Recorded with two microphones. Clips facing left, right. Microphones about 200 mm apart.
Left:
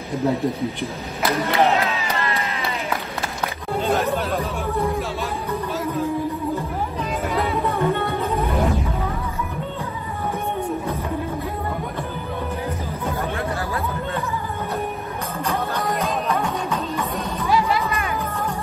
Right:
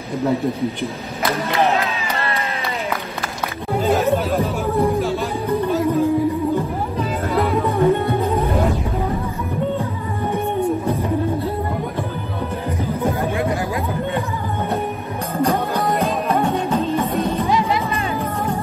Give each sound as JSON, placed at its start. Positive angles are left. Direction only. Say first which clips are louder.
{"t": 3.8, "sound": "chatter", "louder": "right 4 dB", "side_deg": 0}
{"t": 5.7, "sound": "music", "louder": "right 7 dB", "side_deg": 0}
{"t": 7.6, "sound": "music", "louder": "right 5 dB", "side_deg": -15}
{"t": 16.4, "sound": "music", "louder": "right 6 dB", "side_deg": -30}